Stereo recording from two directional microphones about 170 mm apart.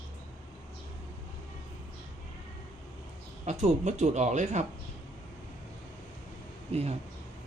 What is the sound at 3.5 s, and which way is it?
Speech, 45° right (ahead or behind).